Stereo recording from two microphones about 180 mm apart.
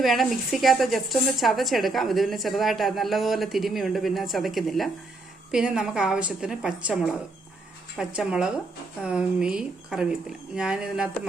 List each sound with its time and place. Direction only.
0.0 s a woman's voice: centre (ahead or behind)